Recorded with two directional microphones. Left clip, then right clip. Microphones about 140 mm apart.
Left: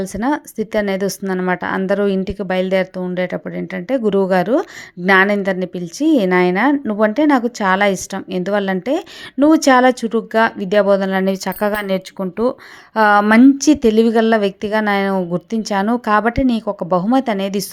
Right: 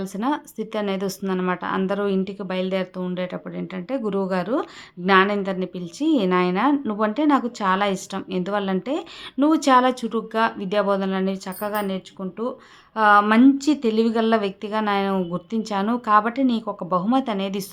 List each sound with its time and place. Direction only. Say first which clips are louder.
0.0 s a woman's voice: left 6 dB; 35° left (ahead or behind); by 12.5 s 65° left (ahead or behind)
13.0 s speech: left 4 dB; 55° left (ahead or behind)
13.7 s a woman's voice: left 8 dB; 35° left (ahead or behind)